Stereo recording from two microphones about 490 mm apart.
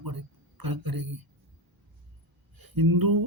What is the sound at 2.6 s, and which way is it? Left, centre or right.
Speech, right.